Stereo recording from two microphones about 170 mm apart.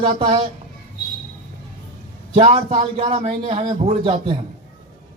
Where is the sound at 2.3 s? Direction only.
40° right (ahead or behind).